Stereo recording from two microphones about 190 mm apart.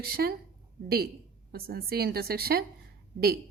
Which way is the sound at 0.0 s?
55° right (ahead or behind).